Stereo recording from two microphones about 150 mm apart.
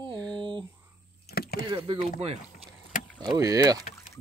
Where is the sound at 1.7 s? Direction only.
35° right (ahead or behind).